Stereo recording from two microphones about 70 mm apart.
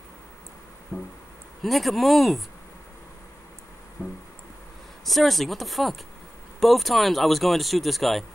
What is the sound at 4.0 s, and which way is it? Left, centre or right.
Music, left.